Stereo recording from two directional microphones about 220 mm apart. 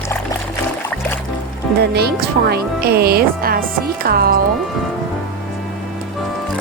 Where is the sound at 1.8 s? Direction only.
45° right (ahead or behind).